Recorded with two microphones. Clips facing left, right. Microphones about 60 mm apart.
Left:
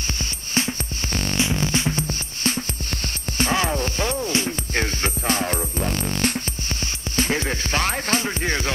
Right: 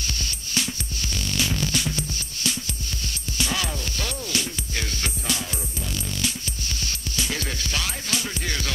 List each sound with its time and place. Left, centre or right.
0.2 s music: left